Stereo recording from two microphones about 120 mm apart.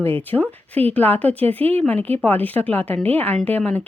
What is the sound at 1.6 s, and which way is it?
Speech, 60° right (ahead or behind).